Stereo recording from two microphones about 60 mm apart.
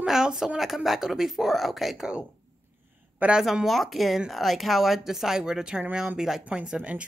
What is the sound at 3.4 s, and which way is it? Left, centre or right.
Speech, centre.